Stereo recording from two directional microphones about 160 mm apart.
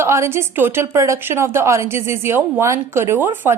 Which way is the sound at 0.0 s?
15° right (ahead or behind).